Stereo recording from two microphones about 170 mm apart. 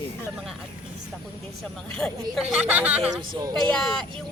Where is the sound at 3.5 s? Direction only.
5° left (ahead or behind).